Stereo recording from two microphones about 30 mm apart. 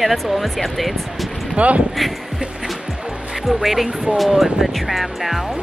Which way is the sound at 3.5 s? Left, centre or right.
Centre.